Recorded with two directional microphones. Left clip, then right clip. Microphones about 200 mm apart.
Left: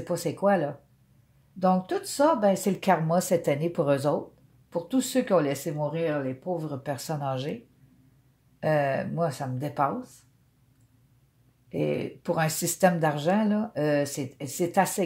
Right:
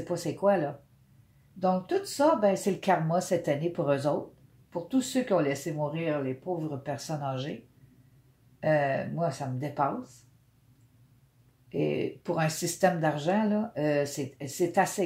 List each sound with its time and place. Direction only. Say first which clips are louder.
0.0 s speech: left 1 dB; 40° left (ahead or behind)
8.5 s speech: left 1 dB; 40° left (ahead or behind)
11.7 s speech: left 1 dB; 40° left (ahead or behind)